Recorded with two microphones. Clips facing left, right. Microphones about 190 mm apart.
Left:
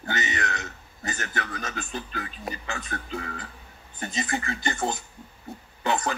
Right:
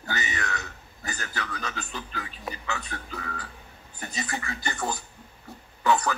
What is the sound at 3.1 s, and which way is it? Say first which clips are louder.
Speech: left 3 dB; 25° left (ahead or behind).